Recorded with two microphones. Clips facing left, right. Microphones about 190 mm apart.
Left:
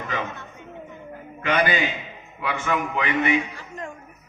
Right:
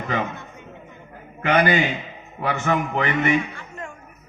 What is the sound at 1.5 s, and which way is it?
A man's voice, 50° right (ahead or behind).